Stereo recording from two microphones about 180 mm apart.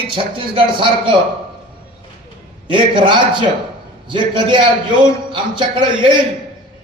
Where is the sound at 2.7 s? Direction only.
25° right (ahead or behind).